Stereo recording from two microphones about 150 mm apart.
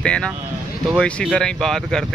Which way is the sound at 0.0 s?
5° left (ahead or behind).